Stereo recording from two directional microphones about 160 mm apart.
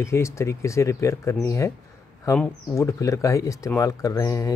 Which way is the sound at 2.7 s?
20° left (ahead or behind).